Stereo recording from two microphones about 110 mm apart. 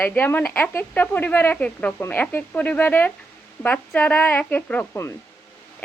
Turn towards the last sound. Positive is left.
turn(degrees=15)  # may be behind; listen again after turning